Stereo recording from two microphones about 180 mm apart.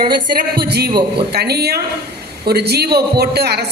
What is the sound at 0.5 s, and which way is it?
Speech, 65° right (ahead or behind).